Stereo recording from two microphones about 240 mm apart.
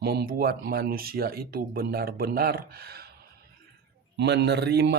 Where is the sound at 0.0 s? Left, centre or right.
Right.